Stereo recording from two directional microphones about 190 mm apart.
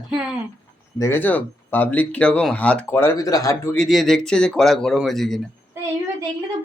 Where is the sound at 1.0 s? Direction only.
10° left (ahead or behind).